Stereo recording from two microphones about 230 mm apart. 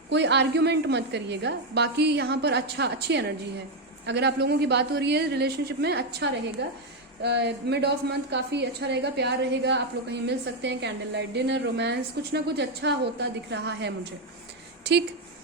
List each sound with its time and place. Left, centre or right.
0.1 s a woman's voice: right